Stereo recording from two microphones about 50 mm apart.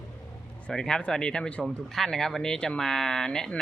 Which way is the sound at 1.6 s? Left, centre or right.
Centre.